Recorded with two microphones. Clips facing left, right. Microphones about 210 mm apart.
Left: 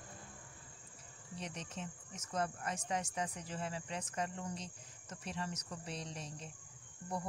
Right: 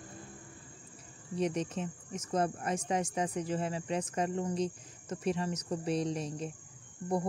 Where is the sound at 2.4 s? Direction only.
25° right (ahead or behind).